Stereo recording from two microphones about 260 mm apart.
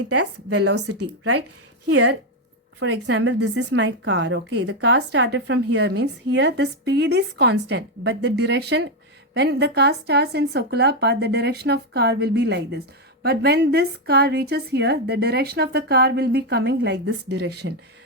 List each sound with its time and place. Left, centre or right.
0.1 s speech: right
1.9 s a woman's voice: right